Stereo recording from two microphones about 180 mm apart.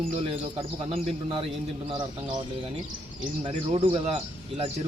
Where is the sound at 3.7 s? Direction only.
35° right (ahead or behind).